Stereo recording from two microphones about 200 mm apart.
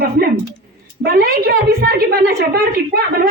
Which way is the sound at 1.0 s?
50° right (ahead or behind).